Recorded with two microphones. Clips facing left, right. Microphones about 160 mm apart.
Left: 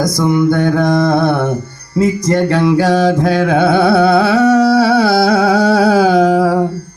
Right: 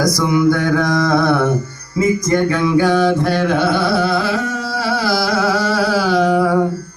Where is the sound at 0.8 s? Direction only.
25° left (ahead or behind).